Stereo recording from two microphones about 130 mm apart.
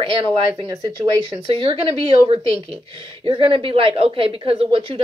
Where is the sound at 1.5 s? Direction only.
45° right (ahead or behind).